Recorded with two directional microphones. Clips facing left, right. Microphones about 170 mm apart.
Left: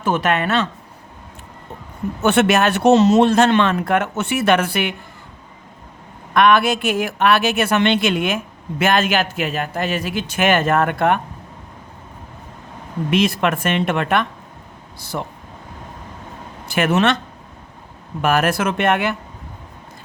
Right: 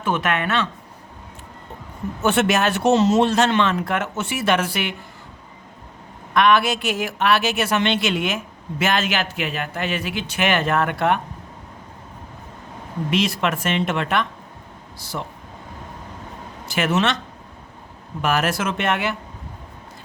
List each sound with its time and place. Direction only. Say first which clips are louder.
0.0 s speech: left 3 dB; 40° left (ahead or behind)
2.2 s speech: left 3 dB; 65° left (ahead or behind)
6.3 s a man's voice: left 3 dB; 50° left (ahead or behind)
13.1 s a man's voice: left 4 dB; 55° left (ahead or behind)
16.7 s speech: left 4 dB; 55° left (ahead or behind)
18.2 s speech: left 4 dB; 55° left (ahead or behind)